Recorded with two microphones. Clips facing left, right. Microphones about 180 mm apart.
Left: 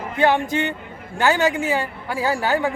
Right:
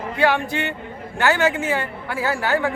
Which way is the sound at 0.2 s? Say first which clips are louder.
Left 2 dB; 20° left (ahead or behind).